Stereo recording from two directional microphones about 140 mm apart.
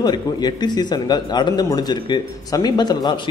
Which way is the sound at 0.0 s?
30° left (ahead or behind).